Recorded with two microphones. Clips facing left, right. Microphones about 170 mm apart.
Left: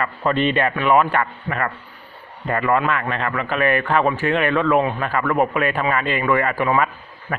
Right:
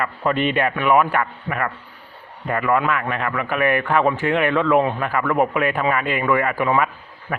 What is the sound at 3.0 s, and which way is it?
Speech, 10° right (ahead or behind).